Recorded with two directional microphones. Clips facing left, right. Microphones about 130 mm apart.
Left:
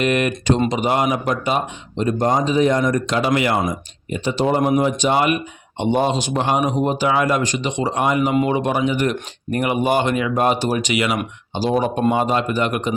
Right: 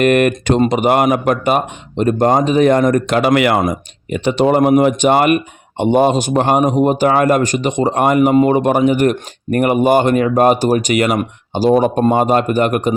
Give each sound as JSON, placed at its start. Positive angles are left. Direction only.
{"t": 0.0, "sound": "speech", "side_deg": -55}